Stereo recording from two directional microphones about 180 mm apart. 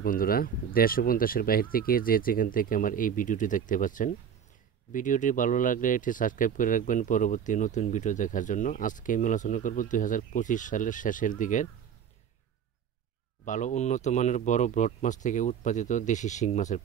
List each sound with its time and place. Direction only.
0.0 s speech: 55° left (ahead or behind)
13.5 s speech: 45° left (ahead or behind)